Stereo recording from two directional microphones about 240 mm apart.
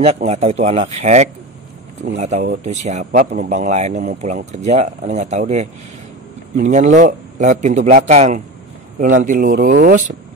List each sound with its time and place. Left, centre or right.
0.0 s speech: right